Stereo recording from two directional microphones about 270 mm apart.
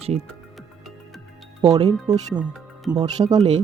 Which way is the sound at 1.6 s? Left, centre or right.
Centre.